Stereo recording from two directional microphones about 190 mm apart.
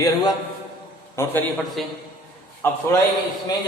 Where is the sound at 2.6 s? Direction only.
10° left (ahead or behind).